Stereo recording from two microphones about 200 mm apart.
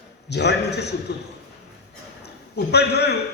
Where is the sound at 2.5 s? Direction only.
55° left (ahead or behind).